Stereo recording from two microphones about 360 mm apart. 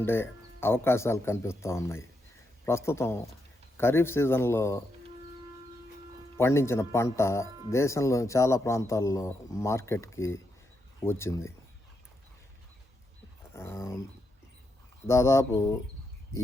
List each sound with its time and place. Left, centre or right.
0.0 s a man's voice: centre
6.3 s a man's voice: centre
13.5 s a sound: centre
15.0 s a man's voice: centre